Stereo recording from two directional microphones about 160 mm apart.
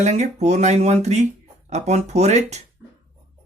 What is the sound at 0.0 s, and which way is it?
Speech, 45° right (ahead or behind).